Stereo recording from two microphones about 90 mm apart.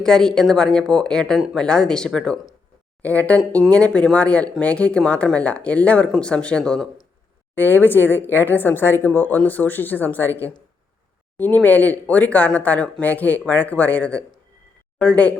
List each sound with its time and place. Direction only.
0.0 s speech: 5° left (ahead or behind)
7.5 s speech: 20° left (ahead or behind)